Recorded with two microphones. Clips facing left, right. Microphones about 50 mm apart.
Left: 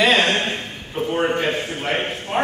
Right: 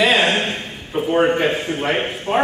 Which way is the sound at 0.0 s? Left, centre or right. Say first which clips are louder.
Right 1 dB; centre.